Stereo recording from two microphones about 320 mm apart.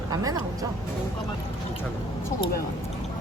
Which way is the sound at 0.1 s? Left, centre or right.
Centre.